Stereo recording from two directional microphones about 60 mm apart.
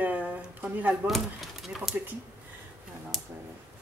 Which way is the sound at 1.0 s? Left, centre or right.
Centre.